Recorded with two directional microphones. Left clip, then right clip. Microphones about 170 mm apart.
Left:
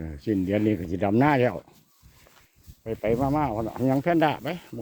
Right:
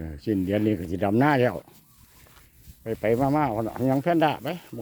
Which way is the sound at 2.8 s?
25° right (ahead or behind).